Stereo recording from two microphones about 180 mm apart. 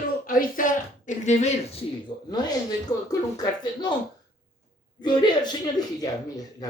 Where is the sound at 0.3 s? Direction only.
50° left (ahead or behind).